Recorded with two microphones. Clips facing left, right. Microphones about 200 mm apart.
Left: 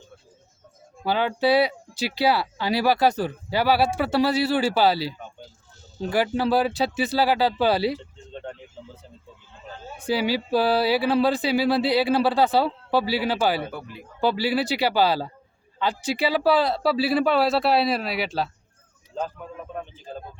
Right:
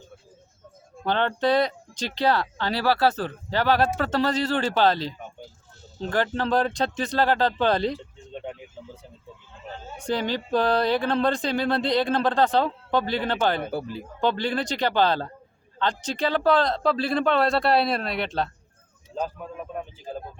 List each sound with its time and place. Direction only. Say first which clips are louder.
1.0 s speech: left 1 dB; 5° left (ahead or behind)
7.9 s a sound: even; 10° right (ahead or behind)
10.1 s speech: left 2 dB; 10° left (ahead or behind)
13.7 s speech: right 7 dB; 30° right (ahead or behind)
14.2 s speech: left 2 dB; 5° left (ahead or behind)
19.7 s speech: even; 10° right (ahead or behind)